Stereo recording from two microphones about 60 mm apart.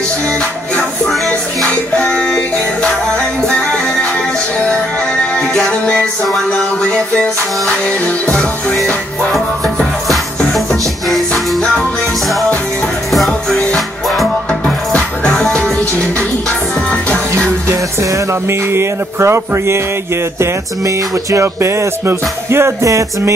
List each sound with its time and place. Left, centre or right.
1.0 s music: centre
2.0 s music: left
3.4 s music: centre
8.3 s music: centre
10.5 s music: centre
13.1 s music: centre
15.6 s music: centre
18.5 s speech: right